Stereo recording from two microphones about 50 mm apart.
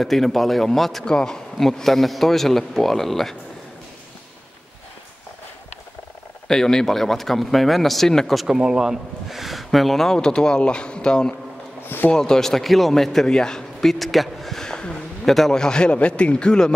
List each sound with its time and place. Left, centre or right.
0.0 s speech: centre
1.0 s speech: centre
6.4 s speech: centre
8.5 s speech: centre
10.1 s a man's voice: centre